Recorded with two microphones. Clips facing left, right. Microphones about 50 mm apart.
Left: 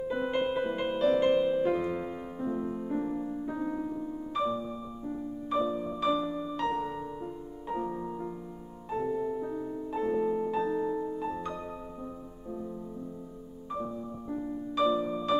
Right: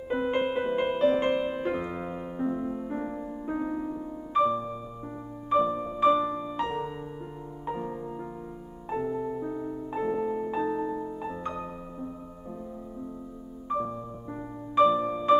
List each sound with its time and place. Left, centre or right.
0.3 s music: right
3.4 s music: right
9.0 s music: centre
14.3 s music: right